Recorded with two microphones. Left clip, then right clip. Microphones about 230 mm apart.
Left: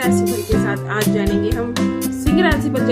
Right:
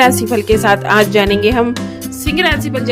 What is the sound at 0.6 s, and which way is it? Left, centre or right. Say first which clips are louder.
A woman's voice: right 10 dB; right.